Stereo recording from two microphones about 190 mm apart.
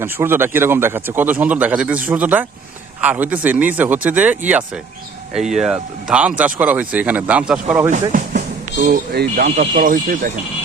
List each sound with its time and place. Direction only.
0.0 s a man's voice: 10° right (ahead or behind)
8.1 s speech: 50° right (ahead or behind)
9.3 s speech: 40° right (ahead or behind)